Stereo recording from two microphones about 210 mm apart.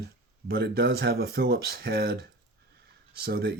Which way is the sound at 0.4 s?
50° right (ahead or behind).